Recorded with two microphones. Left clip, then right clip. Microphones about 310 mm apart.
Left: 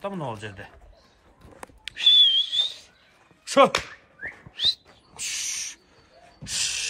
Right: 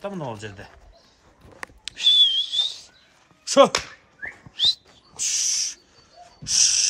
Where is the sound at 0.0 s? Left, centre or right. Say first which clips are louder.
Even; centre.